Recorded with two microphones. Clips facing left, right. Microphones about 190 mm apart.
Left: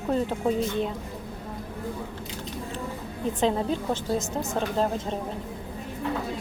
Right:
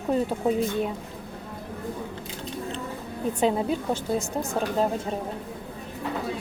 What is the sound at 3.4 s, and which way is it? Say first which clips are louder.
A woman's voice: right 1 dB; 10° right (ahead or behind).